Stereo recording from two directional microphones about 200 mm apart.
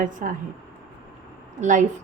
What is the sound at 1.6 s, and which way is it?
Speech, 40° right (ahead or behind).